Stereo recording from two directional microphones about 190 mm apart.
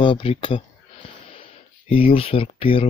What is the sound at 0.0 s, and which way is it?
Speech, 25° left (ahead or behind).